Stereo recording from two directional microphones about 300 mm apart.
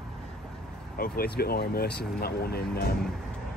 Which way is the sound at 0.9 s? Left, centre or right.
Left.